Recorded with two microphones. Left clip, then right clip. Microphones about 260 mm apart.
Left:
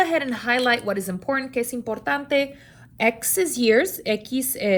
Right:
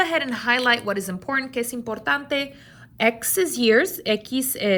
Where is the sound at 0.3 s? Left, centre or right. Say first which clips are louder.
Right 1 dB; right.